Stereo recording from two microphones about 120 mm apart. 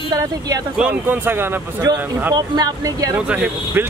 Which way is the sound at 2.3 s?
30° right (ahead or behind).